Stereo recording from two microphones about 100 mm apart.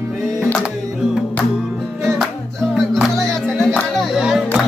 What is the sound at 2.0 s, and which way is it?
Music, centre (ahead or behind).